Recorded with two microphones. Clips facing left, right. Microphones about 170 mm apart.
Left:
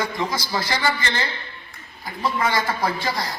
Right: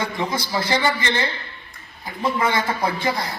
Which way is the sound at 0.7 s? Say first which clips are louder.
Right 4 dB; 20° right (ahead or behind).